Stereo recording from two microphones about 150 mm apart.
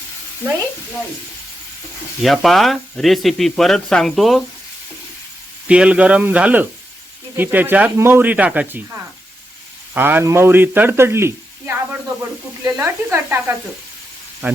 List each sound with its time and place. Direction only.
2.2 s speech: centre (ahead or behind)
5.6 s a man's voice: 10° right (ahead or behind)